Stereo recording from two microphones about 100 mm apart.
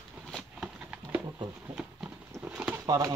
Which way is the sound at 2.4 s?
15° right (ahead or behind).